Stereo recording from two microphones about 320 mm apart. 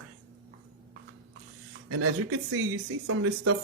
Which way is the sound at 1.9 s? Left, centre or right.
Right.